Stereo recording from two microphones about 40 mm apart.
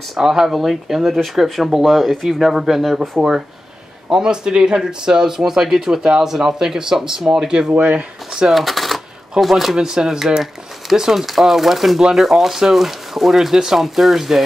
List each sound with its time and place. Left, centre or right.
0.2 s speech: centre
3.2 s speech: centre
7.7 s speech: right
8.5 s speech: centre
9.8 s speech: centre